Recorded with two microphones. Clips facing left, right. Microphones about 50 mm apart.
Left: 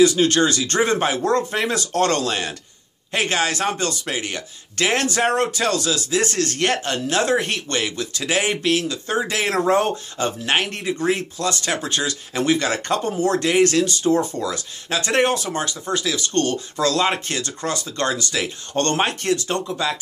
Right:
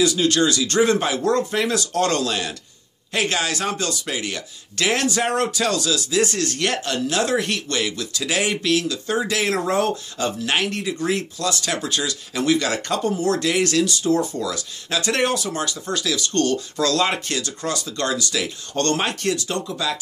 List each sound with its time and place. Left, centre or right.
0.0 s speech: left